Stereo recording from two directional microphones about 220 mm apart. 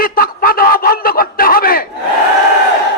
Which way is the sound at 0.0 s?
40° left (ahead or behind).